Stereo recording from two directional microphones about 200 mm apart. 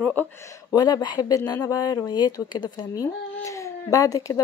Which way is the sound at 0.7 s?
20° left (ahead or behind).